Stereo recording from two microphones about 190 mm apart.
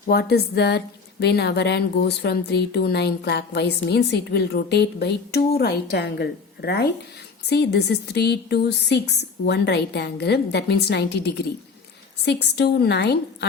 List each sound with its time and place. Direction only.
0.1 s a woman's voice: 55° left (ahead or behind)